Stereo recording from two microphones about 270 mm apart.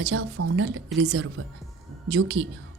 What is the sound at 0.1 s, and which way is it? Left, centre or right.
Speech, right.